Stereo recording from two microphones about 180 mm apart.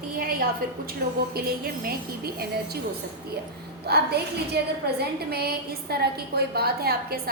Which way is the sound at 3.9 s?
65° right (ahead or behind).